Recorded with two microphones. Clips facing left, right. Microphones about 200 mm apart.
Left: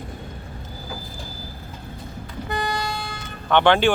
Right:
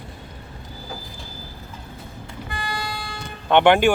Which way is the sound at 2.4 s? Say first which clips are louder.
Left 5 dB; 40° left (ahead or behind).